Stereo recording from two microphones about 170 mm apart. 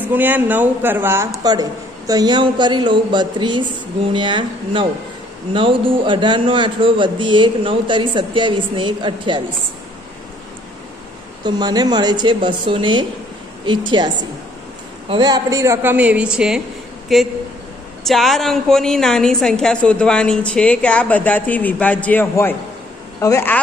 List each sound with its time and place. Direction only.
0.1 s a woman's voice: 10° right (ahead or behind); by 9.4 s 30° right (ahead or behind)
11.4 s a man's voice: 25° right (ahead or behind); by 23.6 s 15° left (ahead or behind)